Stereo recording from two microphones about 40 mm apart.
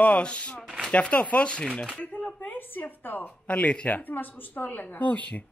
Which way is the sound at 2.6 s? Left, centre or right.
Left.